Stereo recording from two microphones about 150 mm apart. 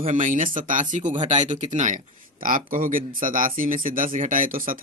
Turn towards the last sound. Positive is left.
turn(degrees=-70)  # may be behind; listen again after turning